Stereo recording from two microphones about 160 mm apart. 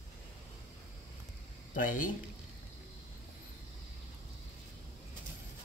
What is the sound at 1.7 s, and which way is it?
Speech, 60° left (ahead or behind).